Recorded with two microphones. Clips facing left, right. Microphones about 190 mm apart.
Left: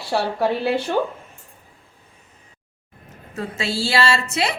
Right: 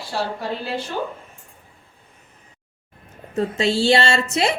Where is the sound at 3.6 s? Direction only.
5° left (ahead or behind).